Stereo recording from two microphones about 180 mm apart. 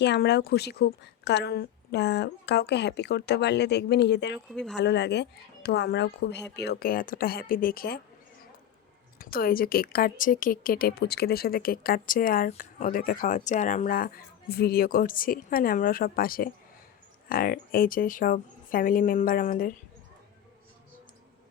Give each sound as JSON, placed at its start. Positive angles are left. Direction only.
{"t": 0.0, "sound": "a woman's voice", "side_deg": 70}
{"t": 9.1, "sound": "a woman's voice", "side_deg": 55}